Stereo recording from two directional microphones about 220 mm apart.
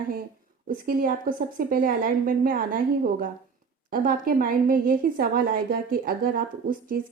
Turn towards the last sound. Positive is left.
turn(degrees=-40)  # may be behind; listen again after turning